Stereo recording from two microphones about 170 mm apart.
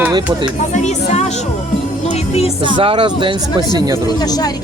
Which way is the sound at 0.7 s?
40° left (ahead or behind).